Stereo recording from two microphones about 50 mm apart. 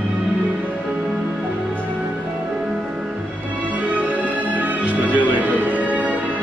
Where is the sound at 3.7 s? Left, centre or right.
Right.